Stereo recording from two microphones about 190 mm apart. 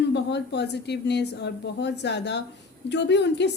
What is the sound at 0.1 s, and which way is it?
A woman's voice, 65° left (ahead or behind).